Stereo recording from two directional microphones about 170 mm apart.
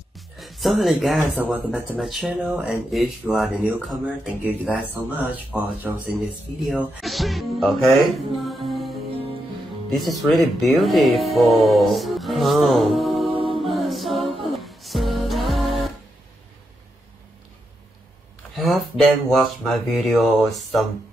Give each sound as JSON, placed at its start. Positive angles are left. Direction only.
{"t": 0.4, "sound": "speech", "side_deg": 0}
{"t": 7.0, "sound": "speech", "side_deg": 0}
{"t": 9.9, "sound": "speech", "side_deg": 0}
{"t": 13.3, "sound": "mantra", "side_deg": -30}
{"t": 13.6, "sound": "a capella", "side_deg": 0}
{"t": 14.4, "sound": "music", "side_deg": 0}
{"t": 18.6, "sound": "speech", "side_deg": 0}